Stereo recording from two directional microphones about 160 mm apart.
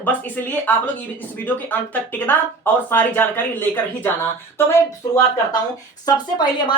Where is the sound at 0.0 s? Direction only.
10° left (ahead or behind).